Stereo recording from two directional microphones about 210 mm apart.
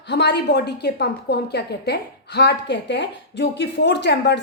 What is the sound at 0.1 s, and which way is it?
A woman's voice, 55° left (ahead or behind).